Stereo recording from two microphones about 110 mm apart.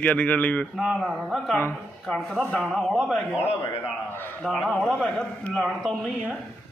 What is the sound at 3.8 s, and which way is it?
Speech, 20° left (ahead or behind).